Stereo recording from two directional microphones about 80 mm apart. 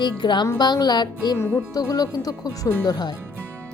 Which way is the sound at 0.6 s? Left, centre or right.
Left.